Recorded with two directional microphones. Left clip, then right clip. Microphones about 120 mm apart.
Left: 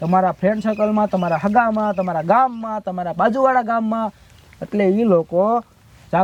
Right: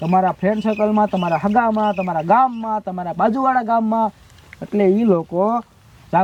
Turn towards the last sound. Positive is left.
turn(degrees=40)  # may be behind; listen again after turning